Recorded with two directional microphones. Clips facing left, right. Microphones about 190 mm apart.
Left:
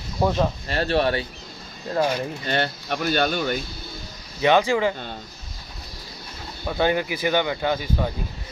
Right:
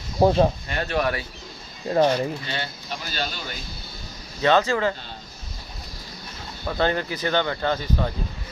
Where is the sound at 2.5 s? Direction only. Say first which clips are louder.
Left 7 dB; 60° left (ahead or behind).